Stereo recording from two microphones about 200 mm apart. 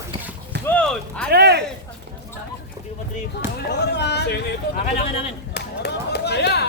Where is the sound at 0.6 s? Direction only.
5° left (ahead or behind).